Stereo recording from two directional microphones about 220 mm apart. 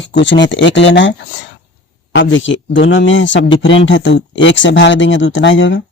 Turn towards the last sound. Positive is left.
turn(degrees=55)  # may be behind; listen again after turning